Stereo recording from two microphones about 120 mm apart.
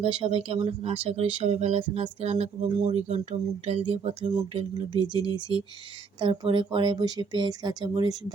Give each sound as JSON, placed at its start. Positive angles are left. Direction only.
{"t": 0.0, "sound": "speech", "side_deg": -50}
{"t": 1.1, "sound": "a sound", "side_deg": -55}
{"t": 2.7, "sound": "speech", "side_deg": -40}
{"t": 3.7, "sound": "speech", "side_deg": -55}